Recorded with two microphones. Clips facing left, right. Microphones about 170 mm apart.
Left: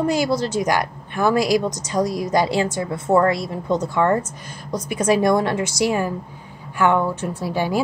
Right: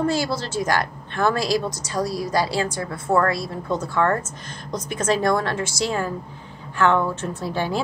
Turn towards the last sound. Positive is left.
turn(degrees=10)  # may be behind; listen again after turning